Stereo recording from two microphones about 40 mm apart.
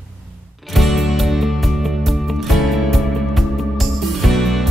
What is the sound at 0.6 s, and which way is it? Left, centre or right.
Music, centre.